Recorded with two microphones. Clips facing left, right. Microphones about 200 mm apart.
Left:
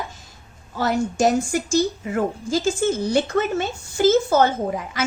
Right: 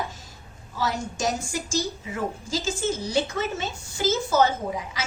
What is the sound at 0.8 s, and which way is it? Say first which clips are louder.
Speech: left 8 dB; 55° left (ahead or behind).